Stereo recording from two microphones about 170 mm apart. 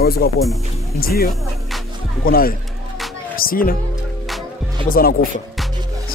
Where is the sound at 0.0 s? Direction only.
65° left (ahead or behind).